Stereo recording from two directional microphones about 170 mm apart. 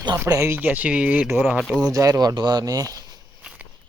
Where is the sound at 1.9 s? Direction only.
20° right (ahead or behind).